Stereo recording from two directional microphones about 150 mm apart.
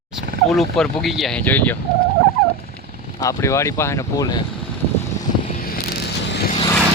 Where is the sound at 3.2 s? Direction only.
20° left (ahead or behind).